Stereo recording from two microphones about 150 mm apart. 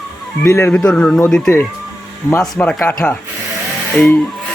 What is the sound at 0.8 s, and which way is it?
Speech, 5° left (ahead or behind).